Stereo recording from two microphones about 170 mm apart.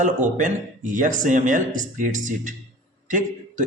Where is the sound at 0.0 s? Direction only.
45° right (ahead or behind).